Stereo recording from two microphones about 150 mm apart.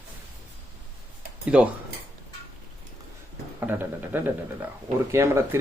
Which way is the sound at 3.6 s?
15° right (ahead or behind).